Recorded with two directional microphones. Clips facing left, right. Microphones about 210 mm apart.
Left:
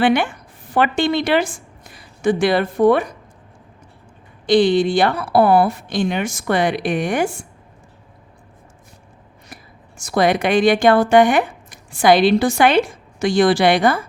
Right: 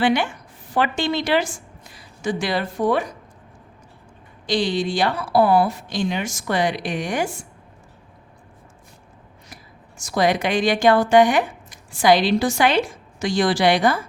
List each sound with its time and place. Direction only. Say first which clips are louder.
0.0 s a woman's voice: left 3 dB; 55° left (ahead or behind)
4.4 s speech: left 8 dB; 55° left (ahead or behind)
10.0 s speech: left 3 dB; 55° left (ahead or behind)